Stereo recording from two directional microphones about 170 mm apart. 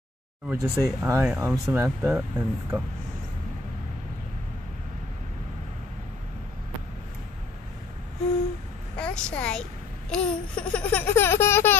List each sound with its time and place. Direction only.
0.5 s speech: 20° right (ahead or behind)
1.2 s speech: 5° right (ahead or behind)
8.9 s a woman's voice: 5° left (ahead or behind)
10.1 s a sound: 5° left (ahead or behind)